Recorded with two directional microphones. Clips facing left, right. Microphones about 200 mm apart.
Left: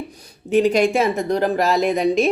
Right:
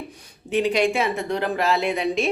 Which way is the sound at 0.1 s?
40° left (ahead or behind).